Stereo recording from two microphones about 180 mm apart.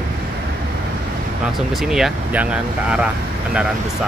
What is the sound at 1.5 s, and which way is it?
Speech, centre (ahead or behind).